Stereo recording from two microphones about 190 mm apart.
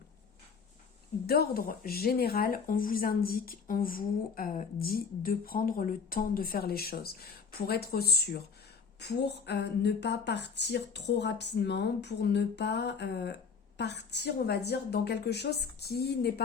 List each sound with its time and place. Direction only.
1.3 s speech: 55° left (ahead or behind)